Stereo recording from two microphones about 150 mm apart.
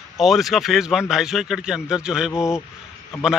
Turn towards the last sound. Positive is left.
turn(degrees=-5)  # may be behind; listen again after turning